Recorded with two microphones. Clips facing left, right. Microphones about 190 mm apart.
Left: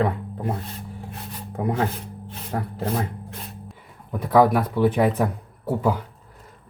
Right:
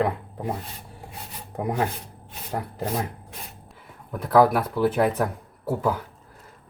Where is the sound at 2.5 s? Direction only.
5° right (ahead or behind).